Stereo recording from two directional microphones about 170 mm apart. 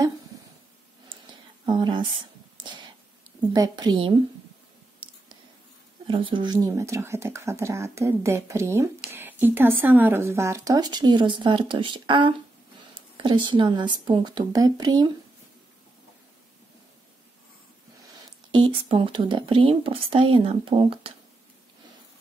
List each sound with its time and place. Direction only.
1.7 s speech: 25° right (ahead or behind)
3.5 s speech: 25° right (ahead or behind)
6.0 s speech: 30° right (ahead or behind)
18.5 s speech: 30° right (ahead or behind)